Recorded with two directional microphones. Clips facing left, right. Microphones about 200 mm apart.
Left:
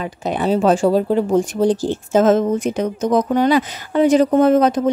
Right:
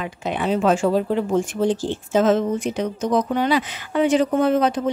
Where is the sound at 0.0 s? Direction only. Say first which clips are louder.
Left 4 dB; 40° left (ahead or behind).